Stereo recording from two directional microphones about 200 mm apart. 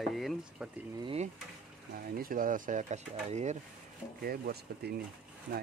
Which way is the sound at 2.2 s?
45° right (ahead or behind).